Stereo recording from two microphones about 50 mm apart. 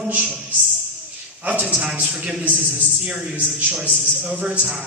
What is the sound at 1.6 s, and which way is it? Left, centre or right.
A man's voice, centre.